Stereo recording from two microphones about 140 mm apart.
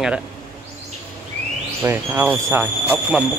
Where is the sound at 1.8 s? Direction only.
15° right (ahead or behind).